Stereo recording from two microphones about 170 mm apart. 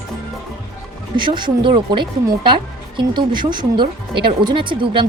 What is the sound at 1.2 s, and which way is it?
Speech, 25° right (ahead or behind).